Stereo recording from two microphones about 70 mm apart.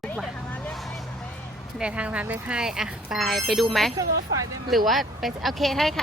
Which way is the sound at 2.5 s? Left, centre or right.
Centre.